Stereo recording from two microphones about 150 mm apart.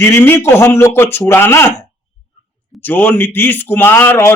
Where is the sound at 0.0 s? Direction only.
15° left (ahead or behind).